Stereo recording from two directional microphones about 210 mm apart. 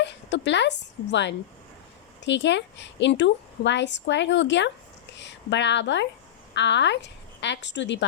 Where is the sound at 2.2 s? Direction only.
60° left (ahead or behind).